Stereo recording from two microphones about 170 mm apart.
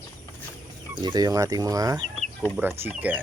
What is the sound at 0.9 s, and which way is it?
Speech, 25° right (ahead or behind).